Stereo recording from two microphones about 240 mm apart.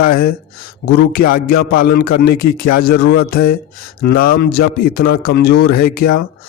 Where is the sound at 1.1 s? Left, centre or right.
Left.